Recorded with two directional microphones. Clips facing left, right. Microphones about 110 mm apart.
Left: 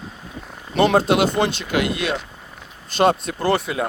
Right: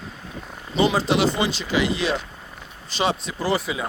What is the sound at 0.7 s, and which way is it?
Speech, 55° left (ahead or behind).